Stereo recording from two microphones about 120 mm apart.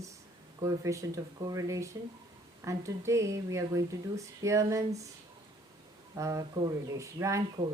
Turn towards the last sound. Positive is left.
turn(degrees=-25)  # may be behind; listen again after turning